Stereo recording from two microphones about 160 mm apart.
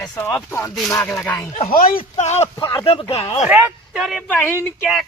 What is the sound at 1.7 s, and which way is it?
Speech, 65° left (ahead or behind).